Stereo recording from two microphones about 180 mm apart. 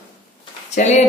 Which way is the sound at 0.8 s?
40° left (ahead or behind).